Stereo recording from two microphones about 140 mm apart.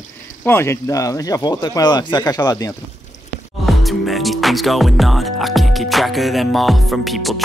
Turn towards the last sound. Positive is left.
turn(degrees=0)  # may be behind; listen again after turning